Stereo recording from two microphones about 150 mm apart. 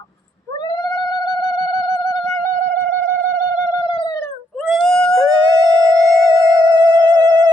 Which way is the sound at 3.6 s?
25° left (ahead or behind).